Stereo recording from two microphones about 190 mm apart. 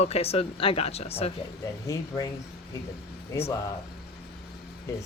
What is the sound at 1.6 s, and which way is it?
Speech, 20° left (ahead or behind).